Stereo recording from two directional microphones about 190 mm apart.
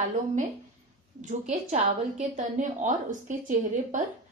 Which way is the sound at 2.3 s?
40° right (ahead or behind).